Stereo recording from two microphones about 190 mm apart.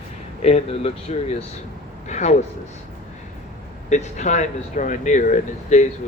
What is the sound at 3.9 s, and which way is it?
Speech, 40° left (ahead or behind).